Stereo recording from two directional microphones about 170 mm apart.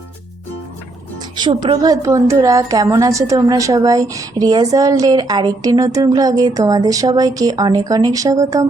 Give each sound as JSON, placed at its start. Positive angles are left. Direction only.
{"t": 1.4, "sound": "a woman's voice", "side_deg": -25}